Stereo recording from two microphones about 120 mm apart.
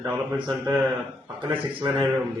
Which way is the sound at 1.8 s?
15° right (ahead or behind).